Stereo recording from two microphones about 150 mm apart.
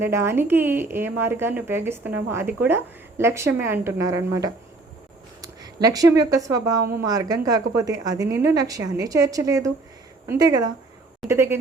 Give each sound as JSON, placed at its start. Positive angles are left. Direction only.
{"t": 0.0, "sound": "a woman's voice", "side_deg": -15}